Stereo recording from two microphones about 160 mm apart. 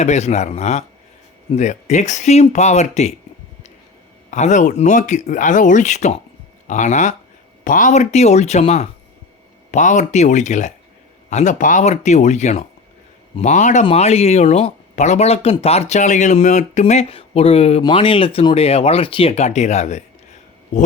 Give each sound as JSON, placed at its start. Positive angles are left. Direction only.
{"t": 0.0, "sound": "speech", "side_deg": 45}
{"t": 4.3, "sound": "speech", "side_deg": 50}